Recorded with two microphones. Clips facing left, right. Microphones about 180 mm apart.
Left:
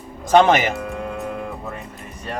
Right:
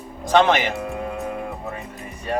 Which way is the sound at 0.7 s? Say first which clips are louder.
Even; centre (ahead or behind).